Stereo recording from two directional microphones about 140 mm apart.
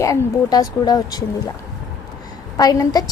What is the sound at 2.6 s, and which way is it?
Speech, 25° left (ahead or behind).